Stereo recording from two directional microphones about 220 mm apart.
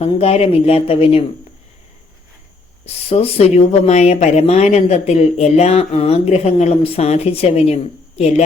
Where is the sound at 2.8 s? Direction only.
25° left (ahead or behind).